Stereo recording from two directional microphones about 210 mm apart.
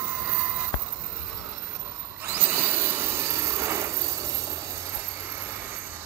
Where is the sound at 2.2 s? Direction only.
10° right (ahead or behind).